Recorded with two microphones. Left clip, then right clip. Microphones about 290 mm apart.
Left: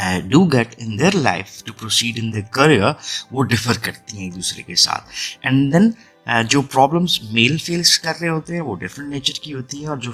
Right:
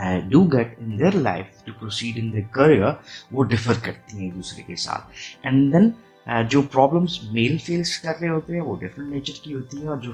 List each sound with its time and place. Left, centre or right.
0.0 s speech: left